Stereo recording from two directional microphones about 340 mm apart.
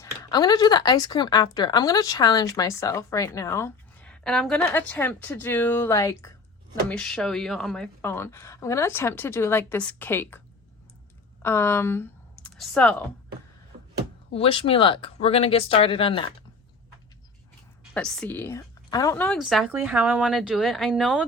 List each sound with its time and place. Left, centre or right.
0.0 s speech: centre
11.4 s speech: centre
14.3 s speech: centre
17.9 s a woman's voice: centre